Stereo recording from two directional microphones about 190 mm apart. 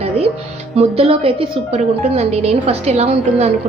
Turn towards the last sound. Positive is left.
turn(degrees=-35)  # may be behind; listen again after turning